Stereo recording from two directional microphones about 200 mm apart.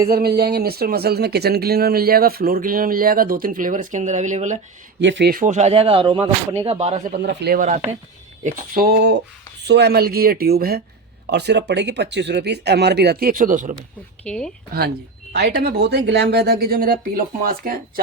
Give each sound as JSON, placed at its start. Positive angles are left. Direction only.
{"t": 0.1, "sound": "speech", "side_deg": -50}
{"t": 4.9, "sound": "speech", "side_deg": -65}
{"t": 5.3, "sound": "speech", "side_deg": -40}
{"t": 7.2, "sound": "speech", "side_deg": -55}
{"t": 14.3, "sound": "speech", "side_deg": 5}
{"t": 14.7, "sound": "speech", "side_deg": -50}